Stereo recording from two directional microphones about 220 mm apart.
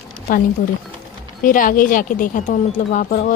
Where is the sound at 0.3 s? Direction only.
40° left (ahead or behind).